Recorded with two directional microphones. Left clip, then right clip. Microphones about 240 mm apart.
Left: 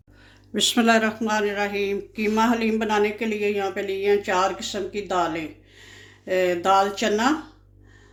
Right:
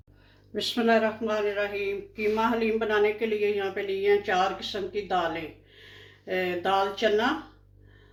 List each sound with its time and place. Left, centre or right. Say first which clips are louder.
0.5 s speech: left 5 dB; left